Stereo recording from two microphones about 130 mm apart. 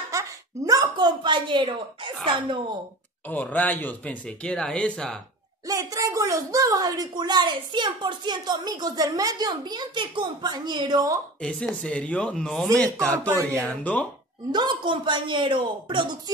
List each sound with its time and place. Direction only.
0.1 s a sound: 25° right (ahead or behind); by 2.1 s 40° right (ahead or behind)
2.2 s speech: 40° right (ahead or behind)
3.3 s speech: 10° left (ahead or behind)
5.7 s speech: 25° right (ahead or behind)
11.4 s speech: 5° left (ahead or behind)
14.5 s speech: 35° right (ahead or behind)